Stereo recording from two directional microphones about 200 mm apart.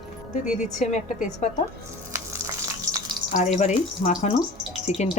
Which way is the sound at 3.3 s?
35° left (ahead or behind).